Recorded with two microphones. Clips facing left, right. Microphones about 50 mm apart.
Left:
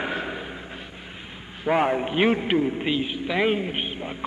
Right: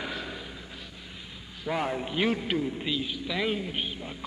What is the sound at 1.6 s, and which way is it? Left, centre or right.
A man's voice, left.